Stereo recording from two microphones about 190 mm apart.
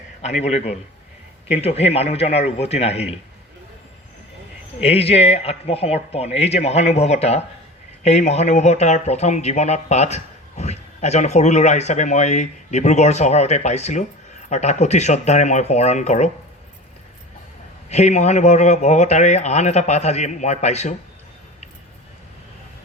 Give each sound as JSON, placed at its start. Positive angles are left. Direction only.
{"t": 0.2, "sound": "speech", "side_deg": 35}
{"t": 4.8, "sound": "speech", "side_deg": 30}
{"t": 17.8, "sound": "speech", "side_deg": 35}